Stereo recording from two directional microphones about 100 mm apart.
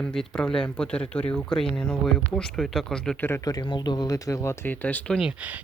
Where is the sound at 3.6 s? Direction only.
50° left (ahead or behind); by 4.5 s 30° left (ahead or behind).